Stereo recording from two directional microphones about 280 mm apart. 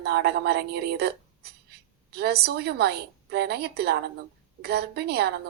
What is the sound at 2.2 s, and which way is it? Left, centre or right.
A woman's voice, right.